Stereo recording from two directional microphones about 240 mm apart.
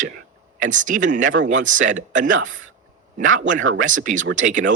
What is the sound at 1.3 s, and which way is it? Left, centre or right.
Speech, right.